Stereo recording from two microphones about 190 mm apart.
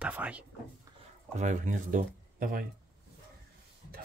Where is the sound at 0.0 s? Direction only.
5° right (ahead or behind).